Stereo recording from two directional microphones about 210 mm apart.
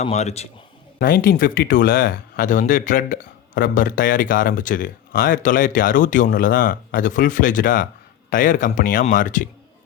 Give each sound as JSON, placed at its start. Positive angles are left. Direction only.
{"t": 0.0, "sound": "speech", "side_deg": 30}
{"t": 0.9, "sound": "speech", "side_deg": 45}